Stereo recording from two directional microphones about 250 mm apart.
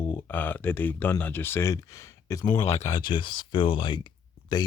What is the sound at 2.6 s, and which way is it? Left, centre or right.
Speech, left.